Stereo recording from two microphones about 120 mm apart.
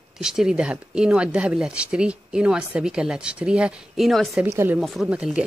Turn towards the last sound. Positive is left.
turn(degrees=-10)  # may be behind; listen again after turning